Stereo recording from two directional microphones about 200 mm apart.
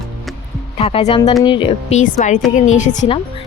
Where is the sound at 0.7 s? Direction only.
30° left (ahead or behind).